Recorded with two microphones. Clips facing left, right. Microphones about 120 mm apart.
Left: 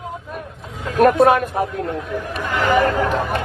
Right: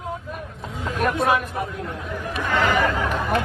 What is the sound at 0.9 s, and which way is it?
Speech, 50° left (ahead or behind).